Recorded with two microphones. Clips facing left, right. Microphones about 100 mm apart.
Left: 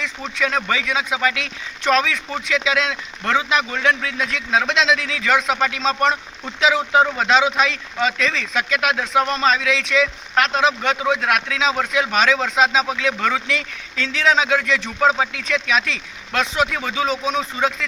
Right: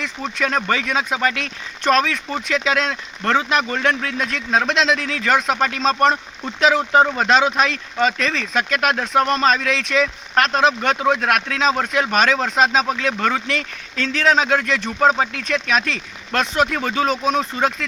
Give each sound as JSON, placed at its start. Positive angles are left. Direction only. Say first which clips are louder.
{"t": 0.0, "sound": "speech", "louder": "right 1 dB", "side_deg": -45}